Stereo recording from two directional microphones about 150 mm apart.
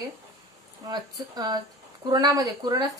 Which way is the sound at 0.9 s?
25° right (ahead or behind).